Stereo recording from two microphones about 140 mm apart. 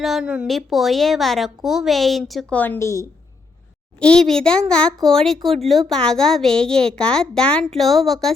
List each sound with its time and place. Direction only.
0.0 s a woman's voice: 5° right (ahead or behind)
2.6 s a woman's voice: 15° left (ahead or behind)
4.0 s a child's voice: 5° left (ahead or behind)